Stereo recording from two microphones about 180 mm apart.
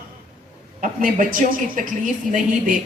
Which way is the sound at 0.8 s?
50° right (ahead or behind).